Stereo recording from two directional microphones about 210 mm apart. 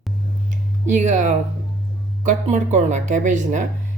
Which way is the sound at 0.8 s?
35° right (ahead or behind).